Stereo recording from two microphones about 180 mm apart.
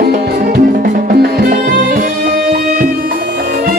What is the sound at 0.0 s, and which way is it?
Music, 55° right (ahead or behind).